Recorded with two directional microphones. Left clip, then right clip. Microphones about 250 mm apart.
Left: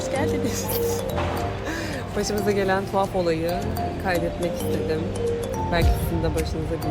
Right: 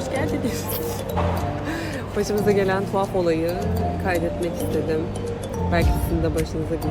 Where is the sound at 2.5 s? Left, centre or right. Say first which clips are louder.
Right 1 dB; centre.